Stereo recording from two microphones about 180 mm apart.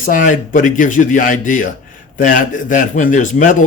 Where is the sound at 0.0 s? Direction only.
50° left (ahead or behind).